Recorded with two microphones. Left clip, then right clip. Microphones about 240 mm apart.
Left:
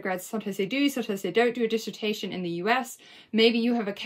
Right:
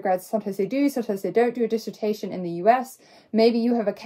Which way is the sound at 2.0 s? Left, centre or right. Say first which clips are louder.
Right 4 dB; left.